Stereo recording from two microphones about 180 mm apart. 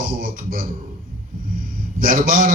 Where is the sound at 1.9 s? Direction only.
50° right (ahead or behind).